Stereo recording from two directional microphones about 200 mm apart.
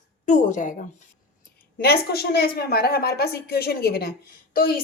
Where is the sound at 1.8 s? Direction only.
50° left (ahead or behind).